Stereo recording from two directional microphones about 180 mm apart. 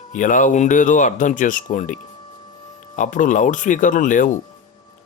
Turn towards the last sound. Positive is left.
turn(degrees=45)  # may be behind; listen again after turning